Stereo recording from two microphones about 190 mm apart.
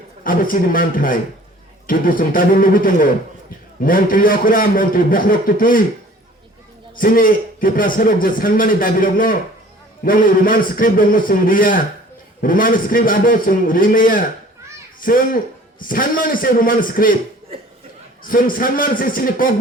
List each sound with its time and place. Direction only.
0.3 s a man's voice: 45° left (ahead or behind)
6.9 s a man's voice: 50° left (ahead or behind)
18.2 s a man's voice: 45° left (ahead or behind)